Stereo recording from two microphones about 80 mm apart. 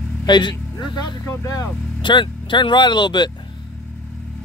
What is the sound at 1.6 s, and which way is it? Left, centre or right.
Speech, left.